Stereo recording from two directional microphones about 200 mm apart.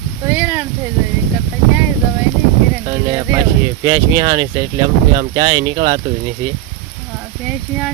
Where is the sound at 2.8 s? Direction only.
20° right (ahead or behind).